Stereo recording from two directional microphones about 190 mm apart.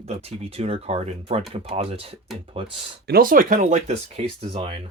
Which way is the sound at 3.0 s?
50° right (ahead or behind).